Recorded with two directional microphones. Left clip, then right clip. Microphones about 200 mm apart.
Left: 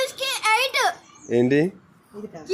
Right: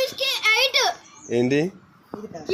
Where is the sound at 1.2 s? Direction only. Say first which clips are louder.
Left 2 dB; 20° left (ahead or behind).